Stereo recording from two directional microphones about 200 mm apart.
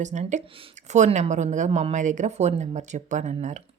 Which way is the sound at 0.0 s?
35° right (ahead or behind).